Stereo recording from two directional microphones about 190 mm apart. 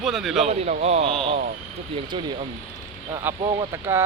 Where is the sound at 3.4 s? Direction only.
25° right (ahead or behind).